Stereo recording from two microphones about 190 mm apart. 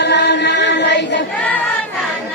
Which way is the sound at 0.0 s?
65° left (ahead or behind).